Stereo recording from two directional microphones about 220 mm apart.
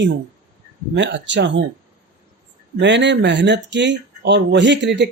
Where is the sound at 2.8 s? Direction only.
55° right (ahead or behind).